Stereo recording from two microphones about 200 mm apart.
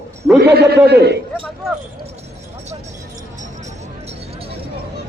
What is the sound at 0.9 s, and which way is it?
Speech, 55° right (ahead or behind).